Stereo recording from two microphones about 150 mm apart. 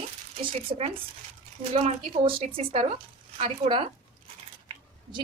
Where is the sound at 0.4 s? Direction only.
35° right (ahead or behind).